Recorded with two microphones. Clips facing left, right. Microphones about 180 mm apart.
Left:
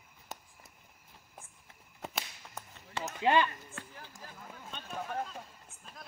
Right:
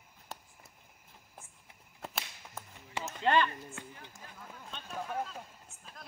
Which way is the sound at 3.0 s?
15° left (ahead or behind).